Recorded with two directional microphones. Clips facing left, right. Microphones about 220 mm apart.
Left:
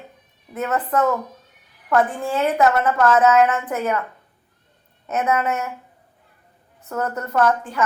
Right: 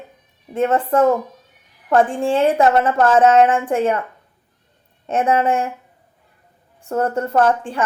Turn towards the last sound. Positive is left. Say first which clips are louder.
# right 2 dB
turn(degrees=-30)  # may be behind; listen again after turning